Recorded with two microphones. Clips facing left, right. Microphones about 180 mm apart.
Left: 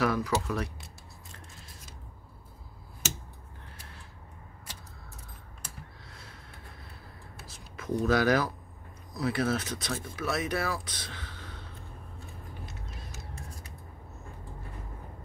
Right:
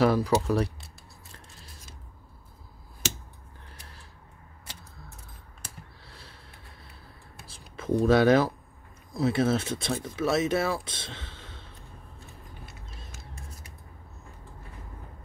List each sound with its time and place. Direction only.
0.0 s speech: 30° right (ahead or behind)
6.0 s snort: 30° right (ahead or behind)
7.4 s a sound: 30° right (ahead or behind)
9.1 s speech: 25° right (ahead or behind)